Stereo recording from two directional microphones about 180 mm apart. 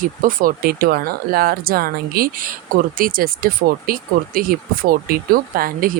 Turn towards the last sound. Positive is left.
turn(degrees=-55)  # may be behind; listen again after turning